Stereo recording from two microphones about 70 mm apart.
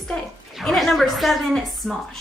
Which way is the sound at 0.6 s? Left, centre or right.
Centre.